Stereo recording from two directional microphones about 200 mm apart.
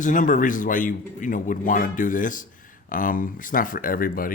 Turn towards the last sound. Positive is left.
turn(degrees=45)  # may be behind; listen again after turning